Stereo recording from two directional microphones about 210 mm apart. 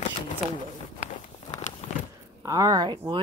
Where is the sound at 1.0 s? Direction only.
35° left (ahead or behind).